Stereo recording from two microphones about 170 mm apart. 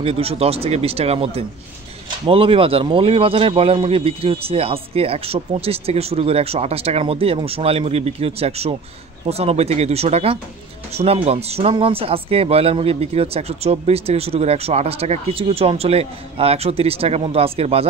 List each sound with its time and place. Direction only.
0.0 s speech: 35° right (ahead or behind)